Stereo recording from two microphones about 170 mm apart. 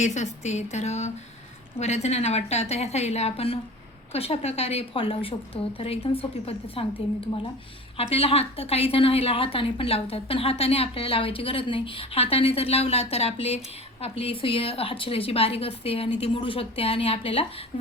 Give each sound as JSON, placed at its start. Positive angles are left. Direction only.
{"t": 0.0, "sound": "a woman's voice", "side_deg": 45}
{"t": 7.9, "sound": "a woman's voice", "side_deg": 35}